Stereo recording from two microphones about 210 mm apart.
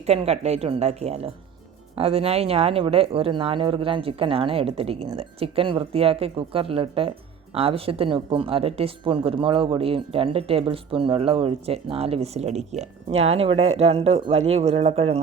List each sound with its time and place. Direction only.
0.0 s speech: 30° right (ahead or behind)